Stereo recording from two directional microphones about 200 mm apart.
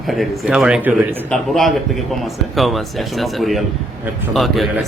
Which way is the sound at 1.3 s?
Centre (ahead or behind).